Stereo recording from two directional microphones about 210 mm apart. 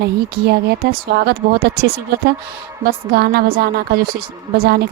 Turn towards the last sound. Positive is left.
turn(degrees=-50)  # may be behind; listen again after turning